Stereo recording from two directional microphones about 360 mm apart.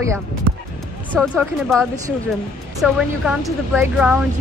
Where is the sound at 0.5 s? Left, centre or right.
Right.